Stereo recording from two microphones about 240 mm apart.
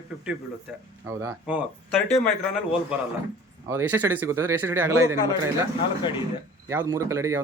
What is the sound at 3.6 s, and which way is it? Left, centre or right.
A man's voice, centre.